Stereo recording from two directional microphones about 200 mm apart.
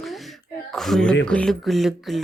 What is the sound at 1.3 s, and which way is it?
Speech, 5° left (ahead or behind).